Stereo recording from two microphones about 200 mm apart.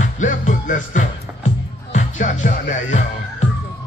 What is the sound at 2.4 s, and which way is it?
Speech, 40° left (ahead or behind).